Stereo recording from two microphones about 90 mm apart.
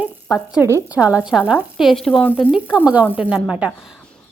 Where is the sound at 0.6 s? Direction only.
25° right (ahead or behind).